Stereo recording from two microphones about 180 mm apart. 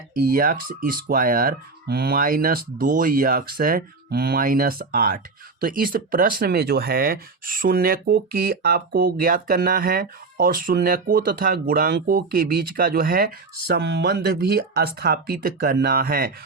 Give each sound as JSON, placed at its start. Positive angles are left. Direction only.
{"t": 0.2, "sound": "speech", "side_deg": -50}